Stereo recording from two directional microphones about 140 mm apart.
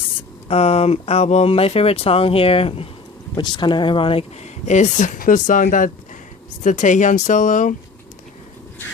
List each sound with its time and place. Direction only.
0.4 s speech: 45° left (ahead or behind); by 7.8 s 65° left (ahead or behind)